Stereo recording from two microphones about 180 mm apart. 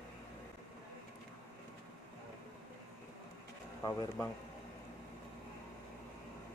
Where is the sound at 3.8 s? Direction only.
20° left (ahead or behind).